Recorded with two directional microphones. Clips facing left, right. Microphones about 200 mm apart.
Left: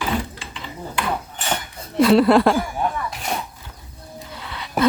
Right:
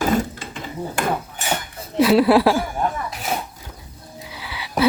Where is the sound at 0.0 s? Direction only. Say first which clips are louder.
Right 5 dB; 45° right (ahead or behind).